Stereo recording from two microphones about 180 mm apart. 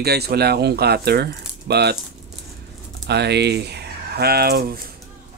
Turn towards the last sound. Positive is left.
turn(degrees=-55)  # may be behind; listen again after turning